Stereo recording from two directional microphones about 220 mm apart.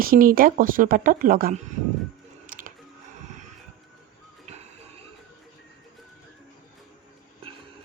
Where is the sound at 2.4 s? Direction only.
40° right (ahead or behind).